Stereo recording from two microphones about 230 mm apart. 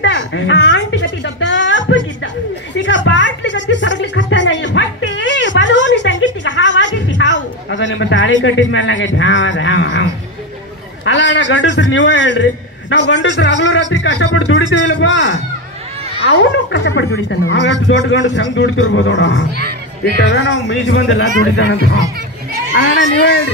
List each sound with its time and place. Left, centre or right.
0.0 s a sound: left
2.7 s music: left
11.1 s speech: left